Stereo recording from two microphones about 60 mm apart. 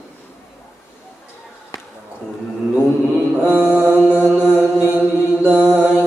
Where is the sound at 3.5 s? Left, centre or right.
Right.